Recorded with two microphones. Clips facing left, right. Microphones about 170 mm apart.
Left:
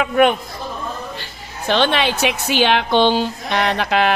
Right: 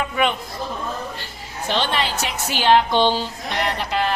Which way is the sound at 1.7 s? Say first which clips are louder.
Left 6 dB; 70° left (ahead or behind).